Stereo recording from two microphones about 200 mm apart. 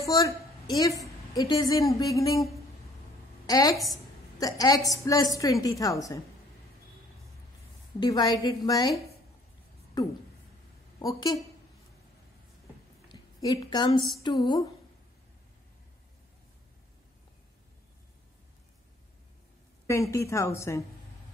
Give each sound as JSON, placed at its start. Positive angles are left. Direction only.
{"t": 0.0, "sound": "a woman's voice", "side_deg": 15}
{"t": 3.4, "sound": "a woman's voice", "side_deg": 20}
{"t": 3.7, "sound": "a woman's voice", "side_deg": 0}
{"t": 4.4, "sound": "a woman's voice", "side_deg": 20}
{"t": 8.0, "sound": "a woman's voice", "side_deg": 20}
{"t": 11.0, "sound": "a woman's voice", "side_deg": 20}
{"t": 13.1, "sound": "a woman's voice", "side_deg": 20}
{"t": 19.9, "sound": "a woman's voice", "side_deg": 15}